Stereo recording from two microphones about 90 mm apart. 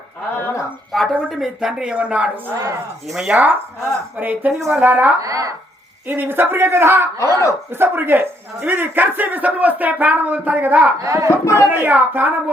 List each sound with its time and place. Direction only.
0.3 s a sound: 25° left (ahead or behind)
0.9 s speech: centre (ahead or behind)
4.2 s speech: 20° right (ahead or behind)
5.2 s speech: 40° right (ahead or behind)
6.1 s speech: 25° right (ahead or behind)
7.2 s speech: 35° left (ahead or behind)
7.8 s speech: 20° right (ahead or behind)
11.0 s speech: 40° right (ahead or behind)
11.3 s speech: 30° left (ahead or behind)
11.6 s speech: 20° right (ahead or behind)